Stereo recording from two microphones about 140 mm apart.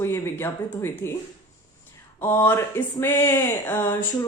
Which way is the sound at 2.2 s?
15° left (ahead or behind).